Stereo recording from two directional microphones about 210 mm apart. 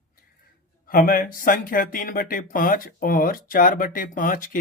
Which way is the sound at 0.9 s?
40° left (ahead or behind).